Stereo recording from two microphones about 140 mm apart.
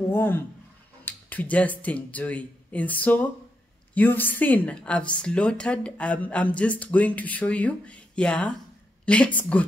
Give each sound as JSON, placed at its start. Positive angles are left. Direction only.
{"t": 0.1, "sound": "a woman's voice", "side_deg": 15}